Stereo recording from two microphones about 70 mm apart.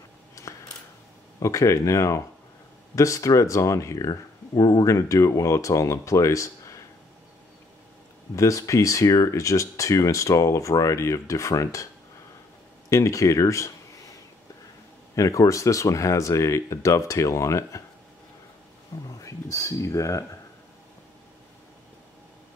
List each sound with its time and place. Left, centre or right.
1.4 s speech: left
4.1 s speech: left
4.8 s speech: left
8.4 s speech: left
12.9 s speech: left
15.1 s speech: left
19.0 s speech: left